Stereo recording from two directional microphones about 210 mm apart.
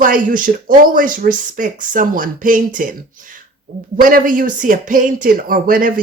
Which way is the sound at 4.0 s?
40° right (ahead or behind).